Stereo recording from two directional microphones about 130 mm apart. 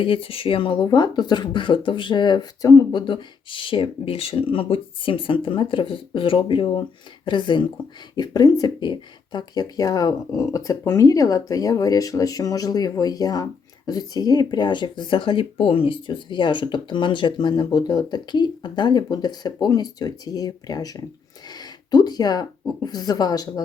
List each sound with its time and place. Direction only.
0.0 s speech: 45° left (ahead or behind)